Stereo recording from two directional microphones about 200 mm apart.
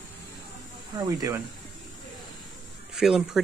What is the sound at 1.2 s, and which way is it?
Speech, 15° right (ahead or behind).